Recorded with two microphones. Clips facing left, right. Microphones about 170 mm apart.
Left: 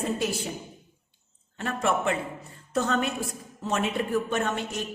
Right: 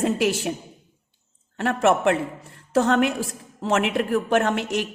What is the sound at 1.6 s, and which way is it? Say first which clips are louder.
A man's voice: right 7 dB; 80° right.